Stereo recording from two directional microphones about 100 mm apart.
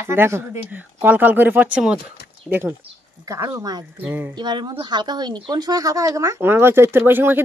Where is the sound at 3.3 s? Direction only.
35° right (ahead or behind).